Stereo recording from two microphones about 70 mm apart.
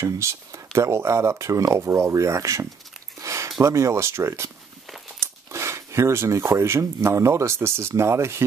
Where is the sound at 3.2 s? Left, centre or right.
Right.